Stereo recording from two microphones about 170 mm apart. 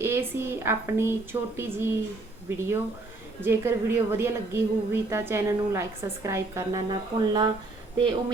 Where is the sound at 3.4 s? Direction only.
15° right (ahead or behind).